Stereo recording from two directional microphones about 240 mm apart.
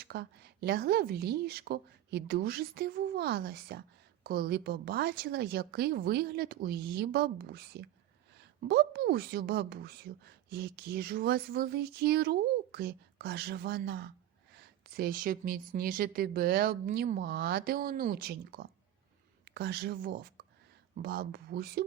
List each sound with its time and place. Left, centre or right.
0.0 s speech: right